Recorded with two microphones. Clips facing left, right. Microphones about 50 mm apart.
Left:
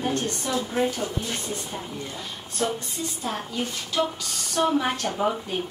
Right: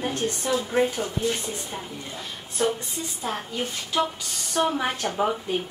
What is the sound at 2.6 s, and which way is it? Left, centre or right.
Speech, centre.